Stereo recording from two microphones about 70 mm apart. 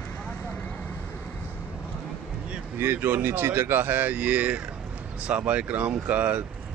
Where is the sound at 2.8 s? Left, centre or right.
Right.